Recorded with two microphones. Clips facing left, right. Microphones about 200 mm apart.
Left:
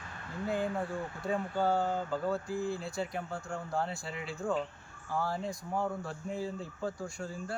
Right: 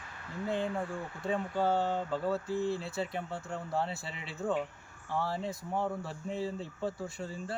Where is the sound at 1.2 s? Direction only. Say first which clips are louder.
Right 1 dB; centre (ahead or behind).